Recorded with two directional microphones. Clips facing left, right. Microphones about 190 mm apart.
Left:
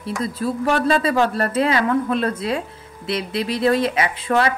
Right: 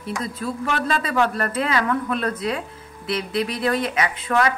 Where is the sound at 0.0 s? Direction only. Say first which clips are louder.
Left 4 dB; 35° left (ahead or behind).